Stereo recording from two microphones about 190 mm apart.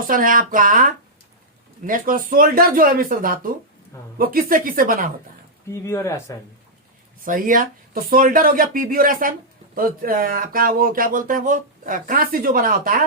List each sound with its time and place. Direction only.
0.1 s speech: 45° right (ahead or behind)
5.6 s speech: 15° left (ahead or behind)
7.3 s speech: 45° right (ahead or behind)